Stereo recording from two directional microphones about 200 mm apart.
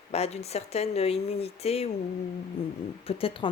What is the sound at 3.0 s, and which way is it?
Speech, 25° left (ahead or behind).